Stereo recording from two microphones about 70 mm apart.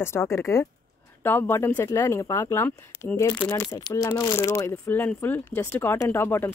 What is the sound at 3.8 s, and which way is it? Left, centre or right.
Speech, left.